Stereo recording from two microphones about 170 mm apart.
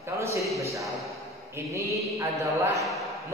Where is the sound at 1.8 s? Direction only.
20° right (ahead or behind).